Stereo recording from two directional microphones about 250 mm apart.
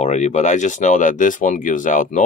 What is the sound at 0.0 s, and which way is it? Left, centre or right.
Speech, left.